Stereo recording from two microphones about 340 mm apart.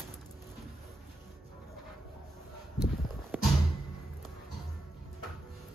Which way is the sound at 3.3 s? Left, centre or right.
Centre.